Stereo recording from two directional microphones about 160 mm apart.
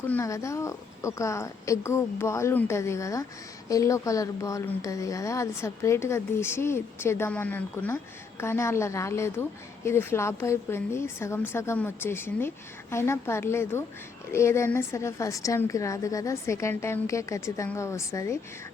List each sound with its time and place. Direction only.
0.1 s speech: 20° left (ahead or behind)